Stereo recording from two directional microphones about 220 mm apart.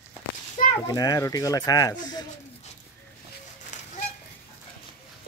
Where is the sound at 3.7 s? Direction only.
35° left (ahead or behind).